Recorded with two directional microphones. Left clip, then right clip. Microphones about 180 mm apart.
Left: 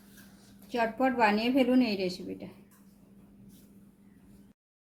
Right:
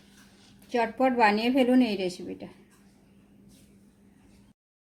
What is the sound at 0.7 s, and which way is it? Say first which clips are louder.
A woman's voice: right 3 dB; 35° right (ahead or behind).